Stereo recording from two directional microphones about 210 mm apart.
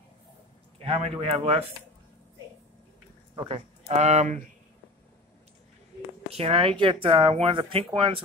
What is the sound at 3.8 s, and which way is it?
Speech, 30° right (ahead or behind).